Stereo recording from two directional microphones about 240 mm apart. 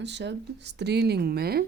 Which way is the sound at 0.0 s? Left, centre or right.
Right.